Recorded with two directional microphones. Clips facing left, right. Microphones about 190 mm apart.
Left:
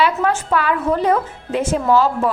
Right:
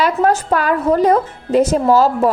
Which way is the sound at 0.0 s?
40° right (ahead or behind).